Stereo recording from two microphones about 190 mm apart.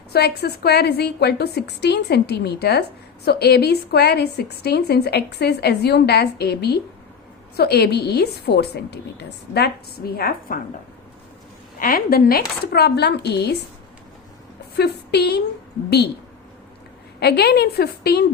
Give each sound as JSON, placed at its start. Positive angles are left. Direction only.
{"t": 0.1, "sound": "a woman's voice", "side_deg": 60}
{"t": 10.2, "sound": "a woman's voice", "side_deg": 50}
{"t": 11.8, "sound": "a woman's voice", "side_deg": 50}
{"t": 14.8, "sound": "speech", "side_deg": 60}
{"t": 17.2, "sound": "a woman's voice", "side_deg": 60}